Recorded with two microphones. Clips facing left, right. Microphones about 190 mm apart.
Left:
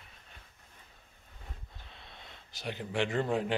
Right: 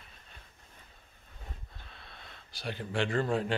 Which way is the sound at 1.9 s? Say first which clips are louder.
Left 1 dB; 20° left (ahead or behind).